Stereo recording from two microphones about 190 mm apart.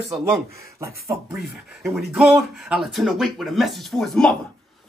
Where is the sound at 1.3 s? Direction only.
Centre (ahead or behind).